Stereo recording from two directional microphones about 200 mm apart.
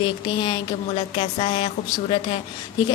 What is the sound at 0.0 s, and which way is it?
A woman's voice, 25° left (ahead or behind).